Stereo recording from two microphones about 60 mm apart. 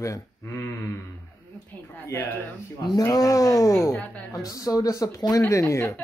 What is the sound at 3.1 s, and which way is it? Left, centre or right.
Speech, left.